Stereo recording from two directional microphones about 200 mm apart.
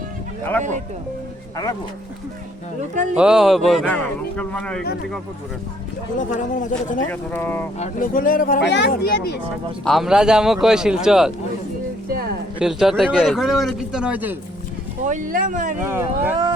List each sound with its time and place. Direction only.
2.9 s speech: 40° right (ahead or behind)
3.2 s a man's voice: 5° right (ahead or behind)
6.1 s a man's voice: 40° left (ahead or behind)
7.1 s speech: 10° left (ahead or behind)
7.8 s speech: 45° left (ahead or behind)
8.6 s speech: 60° left (ahead or behind)
9.8 s a man's voice: centre (ahead or behind)
12.5 s a man's voice: centre (ahead or behind)
15.0 s speech: 40° right (ahead or behind)
15.8 s speech: 10° right (ahead or behind)